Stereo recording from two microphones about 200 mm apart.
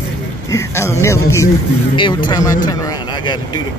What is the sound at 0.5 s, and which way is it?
A man's voice, 15° left (ahead or behind).